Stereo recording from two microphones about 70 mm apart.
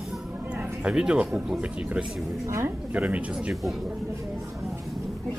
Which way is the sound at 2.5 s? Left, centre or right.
Right.